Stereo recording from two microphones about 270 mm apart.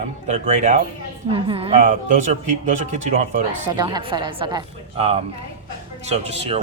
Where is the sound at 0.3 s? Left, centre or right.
Right.